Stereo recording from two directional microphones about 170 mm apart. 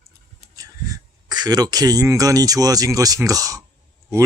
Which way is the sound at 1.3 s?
25° right (ahead or behind).